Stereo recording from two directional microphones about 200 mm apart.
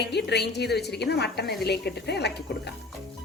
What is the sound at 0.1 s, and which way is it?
A woman's voice, 55° left (ahead or behind).